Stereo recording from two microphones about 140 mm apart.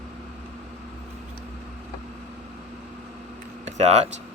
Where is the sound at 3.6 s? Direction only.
55° right (ahead or behind).